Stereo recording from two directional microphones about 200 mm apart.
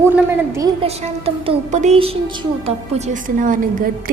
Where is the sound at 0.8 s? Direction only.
30° right (ahead or behind).